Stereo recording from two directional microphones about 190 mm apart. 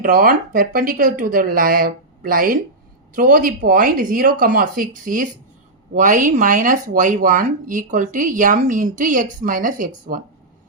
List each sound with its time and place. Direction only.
0.0 s speech: 45° right (ahead or behind)